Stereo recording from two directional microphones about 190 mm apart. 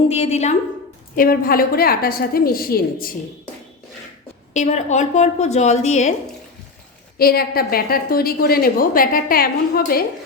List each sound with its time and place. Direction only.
0.1 s a woman's voice: 35° left (ahead or behind)
1.1 s a woman's voice: 50° left (ahead or behind)
4.5 s a woman's voice: 35° left (ahead or behind)
7.2 s a woman's voice: 50° left (ahead or behind)